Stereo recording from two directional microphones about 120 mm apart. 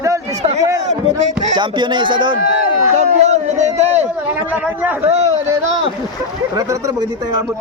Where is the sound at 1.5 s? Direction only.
40° right (ahead or behind).